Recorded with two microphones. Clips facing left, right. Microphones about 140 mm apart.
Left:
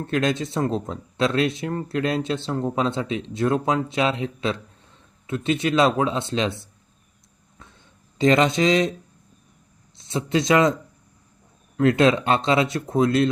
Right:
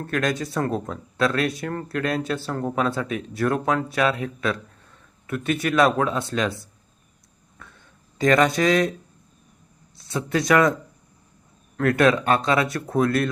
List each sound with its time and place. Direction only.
0.0 s speech: 25° left (ahead or behind)
7.6 s a sound: 20° left (ahead or behind)
8.2 s speech: 25° left (ahead or behind)
9.9 s speech: 20° left (ahead or behind)
11.8 s speech: 20° left (ahead or behind)